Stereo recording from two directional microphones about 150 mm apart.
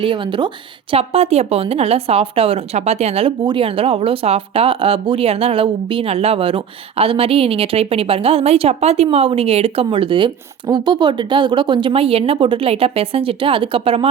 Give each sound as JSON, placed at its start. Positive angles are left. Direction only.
{"t": 0.0, "sound": "speech", "side_deg": -35}